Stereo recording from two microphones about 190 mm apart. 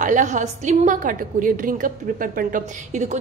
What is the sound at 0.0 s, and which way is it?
A woman's voice, 40° right (ahead or behind).